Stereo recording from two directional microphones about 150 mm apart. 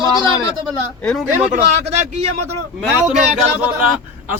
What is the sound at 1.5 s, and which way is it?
Speech, 50° right (ahead or behind).